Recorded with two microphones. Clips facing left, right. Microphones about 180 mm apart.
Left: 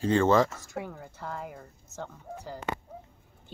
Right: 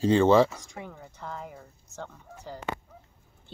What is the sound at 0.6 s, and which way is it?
A woman's voice, 5° left (ahead or behind).